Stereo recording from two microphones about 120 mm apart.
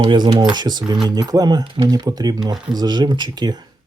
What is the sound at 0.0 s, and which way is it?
Speech, 35° right (ahead or behind).